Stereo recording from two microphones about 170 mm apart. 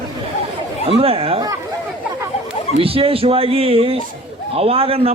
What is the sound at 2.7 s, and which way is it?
A man's voice, 35° right (ahead or behind).